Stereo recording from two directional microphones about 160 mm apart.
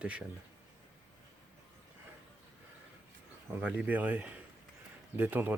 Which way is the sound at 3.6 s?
10° right (ahead or behind).